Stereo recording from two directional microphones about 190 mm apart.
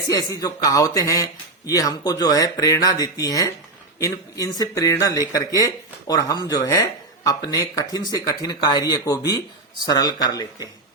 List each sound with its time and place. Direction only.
0.1 s speech: 20° left (ahead or behind)